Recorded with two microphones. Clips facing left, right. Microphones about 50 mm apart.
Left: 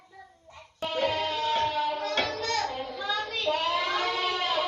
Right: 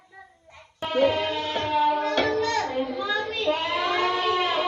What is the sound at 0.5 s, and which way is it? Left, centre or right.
Music, right.